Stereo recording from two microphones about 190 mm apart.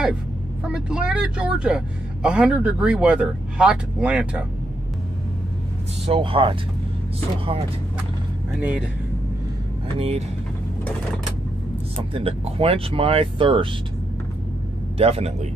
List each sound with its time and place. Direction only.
0.7 s speech: 5° right (ahead or behind)
6.0 s speech: 30° right (ahead or behind)
8.5 s speech: 10° right (ahead or behind)
9.9 s a man's voice: 35° right (ahead or behind)
12.1 s speech: 30° right (ahead or behind)
15.0 s a man's voice: 30° right (ahead or behind)